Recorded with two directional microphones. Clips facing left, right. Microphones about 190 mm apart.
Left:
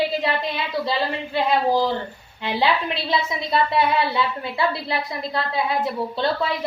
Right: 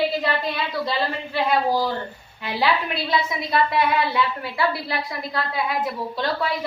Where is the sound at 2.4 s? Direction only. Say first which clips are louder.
Left 2 dB; 25° left (ahead or behind).